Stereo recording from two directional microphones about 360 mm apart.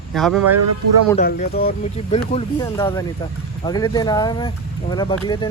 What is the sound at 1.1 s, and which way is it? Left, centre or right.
Speech, left.